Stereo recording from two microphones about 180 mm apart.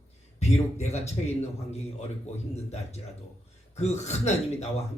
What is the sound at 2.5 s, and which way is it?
Speech, 35° left (ahead or behind).